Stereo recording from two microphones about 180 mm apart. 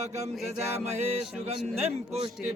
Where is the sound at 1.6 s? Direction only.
35° right (ahead or behind).